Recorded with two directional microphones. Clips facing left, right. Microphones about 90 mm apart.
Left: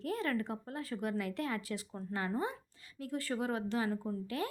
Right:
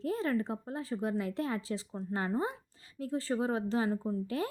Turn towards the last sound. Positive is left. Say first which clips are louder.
# right 3 dB
turn(degrees=-30)  # may be behind; listen again after turning